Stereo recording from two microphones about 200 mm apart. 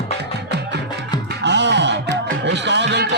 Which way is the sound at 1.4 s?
60° right (ahead or behind).